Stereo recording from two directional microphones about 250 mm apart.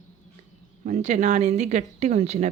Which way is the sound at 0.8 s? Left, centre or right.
Right.